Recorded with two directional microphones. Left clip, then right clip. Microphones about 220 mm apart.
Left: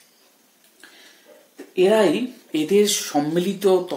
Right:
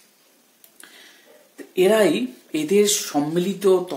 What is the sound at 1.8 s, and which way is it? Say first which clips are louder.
Speech: even; 25° right (ahead or behind).